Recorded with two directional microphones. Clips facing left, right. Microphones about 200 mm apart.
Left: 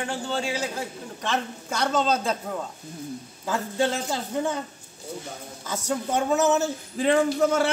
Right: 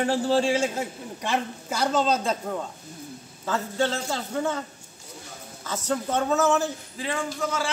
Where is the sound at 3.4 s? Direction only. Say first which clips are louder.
Left 1 dB; 15° left (ahead or behind).